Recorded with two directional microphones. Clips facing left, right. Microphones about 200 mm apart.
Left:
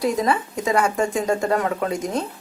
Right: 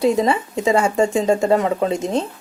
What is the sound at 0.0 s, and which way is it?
Speech, 25° right (ahead or behind).